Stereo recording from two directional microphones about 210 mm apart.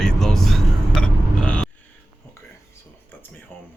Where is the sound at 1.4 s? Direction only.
5° left (ahead or behind).